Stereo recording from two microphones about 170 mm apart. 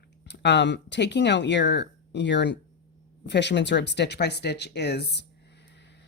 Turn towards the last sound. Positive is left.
turn(degrees=75)  # may be behind; listen again after turning